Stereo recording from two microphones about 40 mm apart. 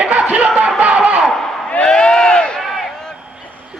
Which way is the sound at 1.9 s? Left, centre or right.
Centre.